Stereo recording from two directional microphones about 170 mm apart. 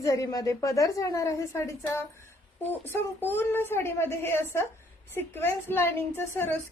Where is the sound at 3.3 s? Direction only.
15° left (ahead or behind).